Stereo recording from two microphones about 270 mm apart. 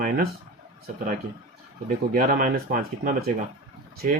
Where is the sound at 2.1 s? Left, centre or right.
Right.